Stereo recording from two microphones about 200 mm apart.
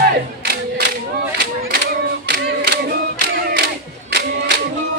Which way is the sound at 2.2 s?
55° right (ahead or behind).